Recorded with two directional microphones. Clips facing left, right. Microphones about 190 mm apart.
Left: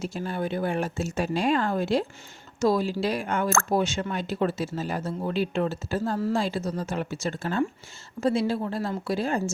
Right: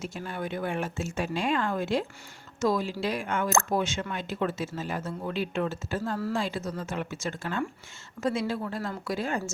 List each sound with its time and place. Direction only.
0.0 s speech: 35° left (ahead or behind)